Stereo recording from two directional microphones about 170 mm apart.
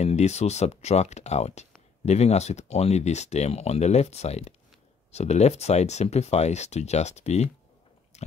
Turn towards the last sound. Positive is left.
turn(degrees=40)  # may be behind; listen again after turning